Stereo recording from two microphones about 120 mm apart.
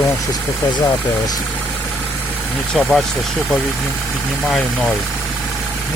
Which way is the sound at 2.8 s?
Centre (ahead or behind).